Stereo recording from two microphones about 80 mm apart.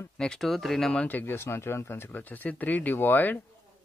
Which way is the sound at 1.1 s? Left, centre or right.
Left.